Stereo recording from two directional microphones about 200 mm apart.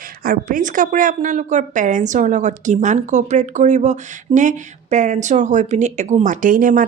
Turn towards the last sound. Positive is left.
turn(degrees=-45)  # may be behind; listen again after turning